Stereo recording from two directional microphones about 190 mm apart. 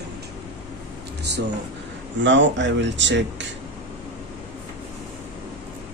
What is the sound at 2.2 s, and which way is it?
Speech, 70° right (ahead or behind).